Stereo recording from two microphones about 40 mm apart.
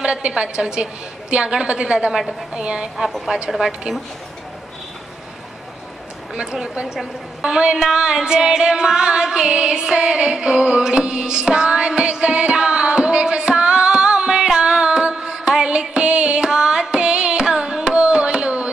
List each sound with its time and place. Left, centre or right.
0.0 s a woman's voice: right
3.4 s a woman's voice: centre
6.3 s a woman's voice: right
15.9 s carnatic music: right